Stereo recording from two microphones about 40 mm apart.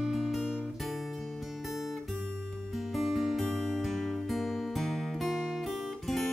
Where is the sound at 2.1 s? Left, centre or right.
Centre.